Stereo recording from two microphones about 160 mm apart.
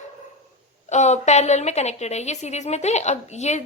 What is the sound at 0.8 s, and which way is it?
A woman's voice, 45° left (ahead or behind).